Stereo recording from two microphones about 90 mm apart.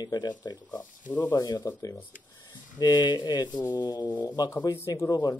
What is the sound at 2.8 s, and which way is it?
Speech, 55° left (ahead or behind).